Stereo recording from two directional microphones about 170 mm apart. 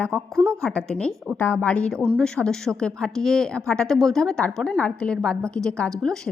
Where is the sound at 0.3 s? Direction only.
15° right (ahead or behind).